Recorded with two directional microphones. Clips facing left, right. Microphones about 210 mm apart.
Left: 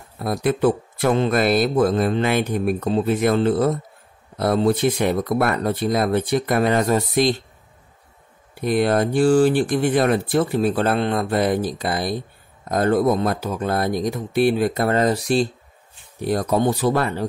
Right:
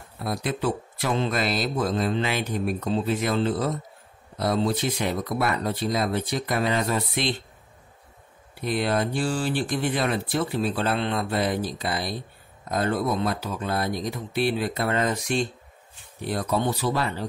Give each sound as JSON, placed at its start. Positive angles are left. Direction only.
{"t": 0.2, "sound": "speech", "side_deg": 50}
{"t": 8.5, "sound": "speech", "side_deg": 50}